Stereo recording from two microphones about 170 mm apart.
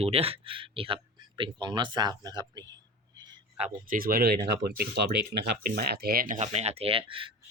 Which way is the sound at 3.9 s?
60° right (ahead or behind).